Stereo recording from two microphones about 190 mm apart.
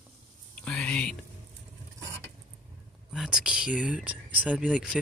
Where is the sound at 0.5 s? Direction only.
5° left (ahead or behind).